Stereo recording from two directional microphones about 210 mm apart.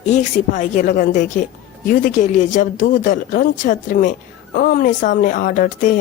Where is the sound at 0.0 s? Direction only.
35° left (ahead or behind).